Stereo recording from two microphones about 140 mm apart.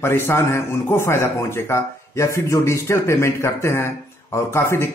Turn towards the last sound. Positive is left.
turn(degrees=20)  # may be behind; listen again after turning